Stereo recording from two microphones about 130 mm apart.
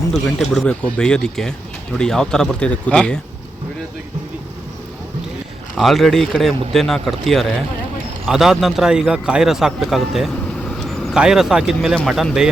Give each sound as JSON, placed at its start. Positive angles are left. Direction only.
{"t": 0.1, "sound": "a man's voice", "side_deg": 5}
{"t": 5.7, "sound": "a man's voice", "side_deg": 0}